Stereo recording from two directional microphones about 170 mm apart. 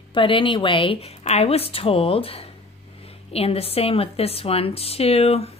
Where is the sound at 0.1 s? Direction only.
30° left (ahead or behind).